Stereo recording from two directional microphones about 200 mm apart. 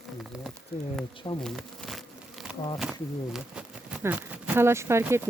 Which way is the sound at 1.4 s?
Centre (ahead or behind).